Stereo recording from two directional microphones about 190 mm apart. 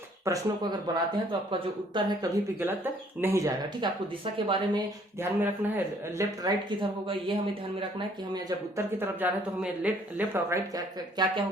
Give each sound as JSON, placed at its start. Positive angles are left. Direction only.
{"t": 0.3, "sound": "speech", "side_deg": -15}
{"t": 2.0, "sound": "speech", "side_deg": -15}
{"t": 4.4, "sound": "speech", "side_deg": -25}
{"t": 5.4, "sound": "speech", "side_deg": -10}
{"t": 6.4, "sound": "speech", "side_deg": -25}